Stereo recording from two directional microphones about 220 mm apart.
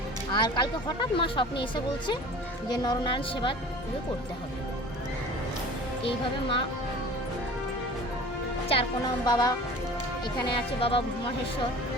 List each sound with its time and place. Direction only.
0.3 s speech: 20° left (ahead or behind)
2.7 s speech: 20° left (ahead or behind)
6.1 s speech: 25° left (ahead or behind)
9.2 s speech: 20° left (ahead or behind)